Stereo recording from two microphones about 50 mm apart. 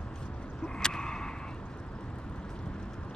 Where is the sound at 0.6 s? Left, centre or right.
Centre.